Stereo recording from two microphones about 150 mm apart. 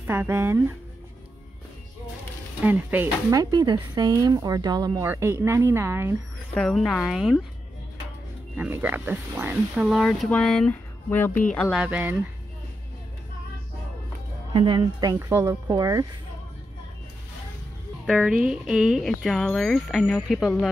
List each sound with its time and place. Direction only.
0.0 s speech: 15° right (ahead or behind)
2.6 s speech: 10° right (ahead or behind)
3.3 s speech: 25° right (ahead or behind)
6.5 s speech: 5° left (ahead or behind)
8.5 s speech: 10° right (ahead or behind)
9.8 s speech: centre (ahead or behind)
11.7 s speech: 5° right (ahead or behind)
14.5 s speech: 30° right (ahead or behind)
18.0 s speech: 5° right (ahead or behind)